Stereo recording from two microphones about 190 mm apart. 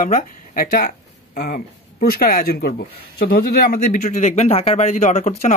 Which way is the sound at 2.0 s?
50° left (ahead or behind).